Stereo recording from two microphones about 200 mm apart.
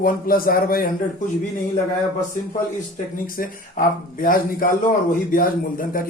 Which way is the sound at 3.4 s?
45° left (ahead or behind).